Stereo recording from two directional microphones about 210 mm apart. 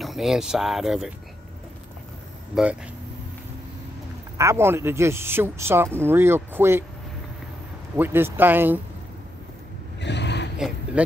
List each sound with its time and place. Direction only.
0.0 s speech: centre (ahead or behind)
2.5 s speech: 5° right (ahead or behind)
4.4 s speech: 15° right (ahead or behind)
7.9 s speech: 10° right (ahead or behind)
9.9 s vehicle: 55° left (ahead or behind)